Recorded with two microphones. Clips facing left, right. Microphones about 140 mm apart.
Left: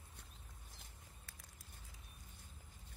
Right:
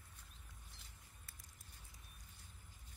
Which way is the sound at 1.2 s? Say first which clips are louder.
Left 3 dB; 65° left (ahead or behind).